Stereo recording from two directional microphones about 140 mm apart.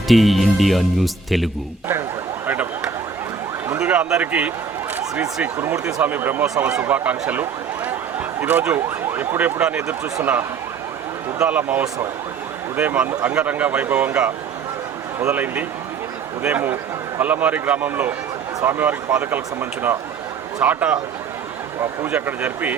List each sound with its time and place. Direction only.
0.1 s speech: centre (ahead or behind)
2.5 s speech: 10° right (ahead or behind)
11.3 s speech: 10° right (ahead or behind)
22.0 s speech: 10° right (ahead or behind)